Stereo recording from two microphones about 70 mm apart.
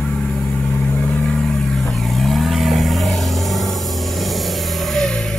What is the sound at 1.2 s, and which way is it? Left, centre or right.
Vehicle, centre.